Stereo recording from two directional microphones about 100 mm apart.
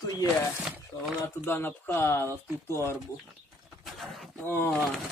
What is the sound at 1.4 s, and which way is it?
Speech, 20° left (ahead or behind).